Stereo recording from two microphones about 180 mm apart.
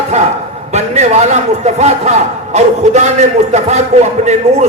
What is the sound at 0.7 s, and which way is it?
A man's voice, 40° right (ahead or behind).